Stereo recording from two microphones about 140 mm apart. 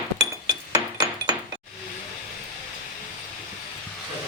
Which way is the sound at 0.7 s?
25° right (ahead or behind).